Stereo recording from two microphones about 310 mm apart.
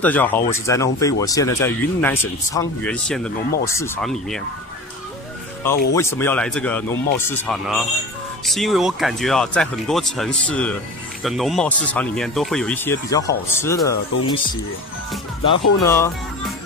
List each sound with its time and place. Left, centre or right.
0.0 s speech: centre
5.6 s speech: centre